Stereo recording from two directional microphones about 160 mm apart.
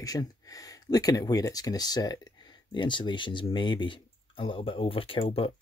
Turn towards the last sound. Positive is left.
turn(degrees=35)  # may be behind; listen again after turning